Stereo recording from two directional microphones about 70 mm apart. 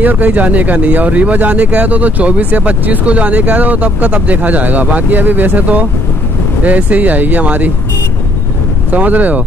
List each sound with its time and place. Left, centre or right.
0.0 s speech: right
8.9 s speech: right